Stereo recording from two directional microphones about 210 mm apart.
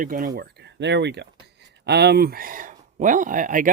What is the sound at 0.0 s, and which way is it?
Speech, 40° right (ahead or behind).